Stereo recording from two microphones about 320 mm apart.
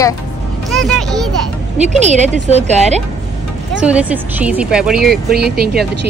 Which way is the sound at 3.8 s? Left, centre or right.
Centre.